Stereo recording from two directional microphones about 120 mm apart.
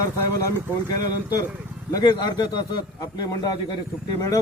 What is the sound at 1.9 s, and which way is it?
A man's voice, 35° left (ahead or behind).